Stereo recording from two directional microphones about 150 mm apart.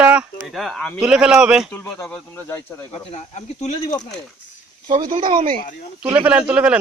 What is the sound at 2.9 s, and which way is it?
Speech, 50° left (ahead or behind).